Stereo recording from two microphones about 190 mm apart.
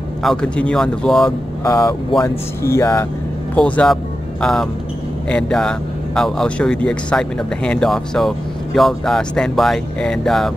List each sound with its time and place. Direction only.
0.2 s speech: 5° left (ahead or behind)
1.6 s speech: 15° left (ahead or behind); by 10.5 s centre (ahead or behind)